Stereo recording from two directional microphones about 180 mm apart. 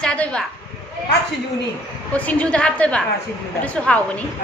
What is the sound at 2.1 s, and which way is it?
A woman's voice, 5° left (ahead or behind).